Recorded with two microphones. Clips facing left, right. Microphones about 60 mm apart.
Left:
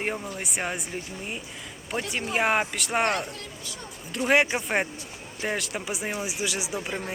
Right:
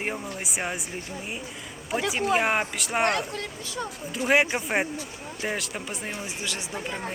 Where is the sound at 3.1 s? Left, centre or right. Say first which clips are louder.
Right 2 dB; right.